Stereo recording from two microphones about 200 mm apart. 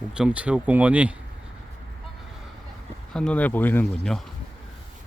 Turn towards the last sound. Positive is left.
turn(degrees=5)  # may be behind; listen again after turning